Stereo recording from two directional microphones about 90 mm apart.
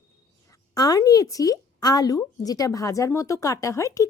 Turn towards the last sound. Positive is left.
turn(degrees=35)  # may be behind; listen again after turning